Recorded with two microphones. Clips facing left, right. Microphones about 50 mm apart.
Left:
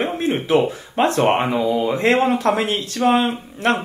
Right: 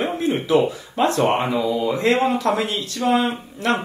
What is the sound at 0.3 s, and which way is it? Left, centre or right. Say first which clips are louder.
Speech: even; left.